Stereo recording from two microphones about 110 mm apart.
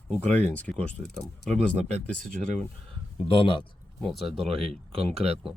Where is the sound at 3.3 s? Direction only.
50° left (ahead or behind).